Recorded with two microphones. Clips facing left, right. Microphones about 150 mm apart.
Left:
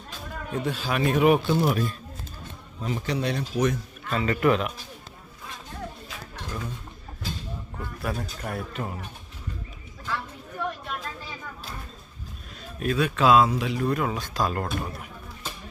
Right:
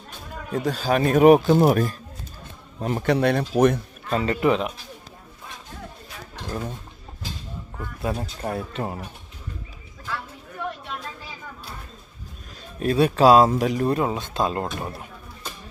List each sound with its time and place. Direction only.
0.5 s speech: 40° right (ahead or behind)
2.8 s speech: 60° right (ahead or behind)
4.1 s speech: 40° right (ahead or behind)
8.0 s speech: 30° right (ahead or behind)
12.8 s speech: 35° right (ahead or behind)
13.9 s speech: 25° right (ahead or behind)